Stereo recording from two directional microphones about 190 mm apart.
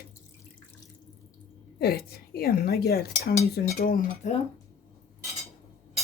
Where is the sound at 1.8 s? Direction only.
55° left (ahead or behind).